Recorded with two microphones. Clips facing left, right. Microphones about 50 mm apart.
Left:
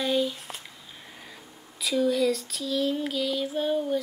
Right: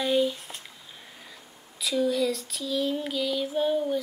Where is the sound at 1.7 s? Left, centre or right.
Centre.